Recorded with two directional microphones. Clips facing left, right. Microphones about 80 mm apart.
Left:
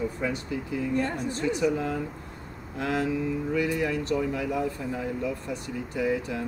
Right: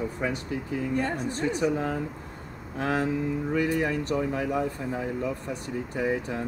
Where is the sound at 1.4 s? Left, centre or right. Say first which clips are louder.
Left 1 dB; right.